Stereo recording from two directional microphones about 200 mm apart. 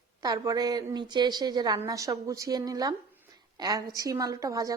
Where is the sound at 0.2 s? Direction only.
20° right (ahead or behind).